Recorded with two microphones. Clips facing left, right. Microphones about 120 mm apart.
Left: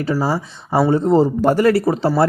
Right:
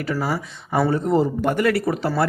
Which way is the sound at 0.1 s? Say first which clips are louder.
Left 4 dB; 30° left (ahead or behind).